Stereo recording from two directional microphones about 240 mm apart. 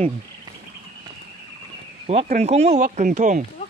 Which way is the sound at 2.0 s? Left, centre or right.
Right.